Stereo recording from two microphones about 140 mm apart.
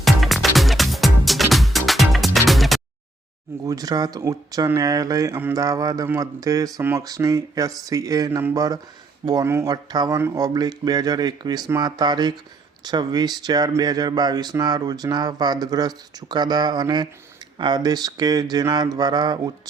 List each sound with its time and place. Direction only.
0.0 s music: centre (ahead or behind)
3.6 s speech: 25° right (ahead or behind)